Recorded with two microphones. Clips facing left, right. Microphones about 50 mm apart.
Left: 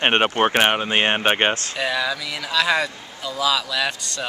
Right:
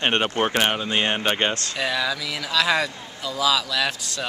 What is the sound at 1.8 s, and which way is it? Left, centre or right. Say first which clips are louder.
Speech: left 1 dB; centre.